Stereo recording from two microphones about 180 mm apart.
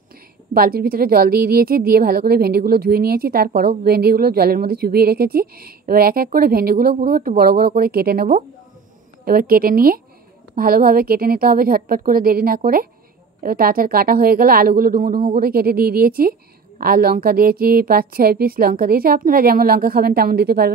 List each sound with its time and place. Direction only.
0.6 s a woman's voice: 55° right (ahead or behind)
15.1 s speech: 25° right (ahead or behind)
15.4 s a woman's voice: 55° right (ahead or behind)